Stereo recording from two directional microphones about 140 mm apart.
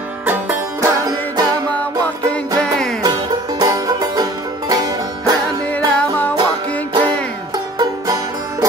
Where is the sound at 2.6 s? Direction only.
5° left (ahead or behind).